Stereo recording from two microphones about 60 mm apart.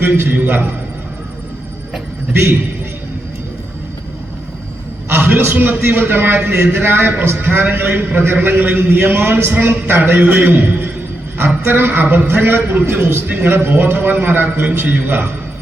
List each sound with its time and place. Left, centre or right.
0.0 s a man's voice: right
5.0 s a sound: right
5.5 s a man's voice: right